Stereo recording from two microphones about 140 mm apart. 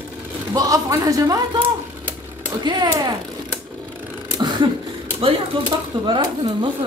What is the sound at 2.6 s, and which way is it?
Speech, 30° right (ahead or behind).